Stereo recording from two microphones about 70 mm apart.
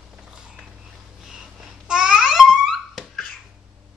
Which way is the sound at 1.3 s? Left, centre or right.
Centre.